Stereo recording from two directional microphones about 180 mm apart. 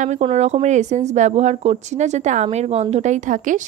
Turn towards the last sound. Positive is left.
turn(degrees=-45)  # may be behind; listen again after turning